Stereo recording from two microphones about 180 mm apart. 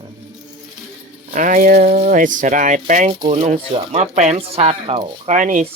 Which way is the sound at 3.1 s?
30° right (ahead or behind).